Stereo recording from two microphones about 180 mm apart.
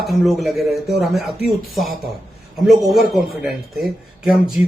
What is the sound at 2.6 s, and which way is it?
A man's voice, centre (ahead or behind).